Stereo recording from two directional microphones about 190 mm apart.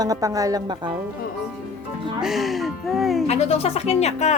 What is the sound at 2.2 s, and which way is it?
Speech, centre (ahead or behind).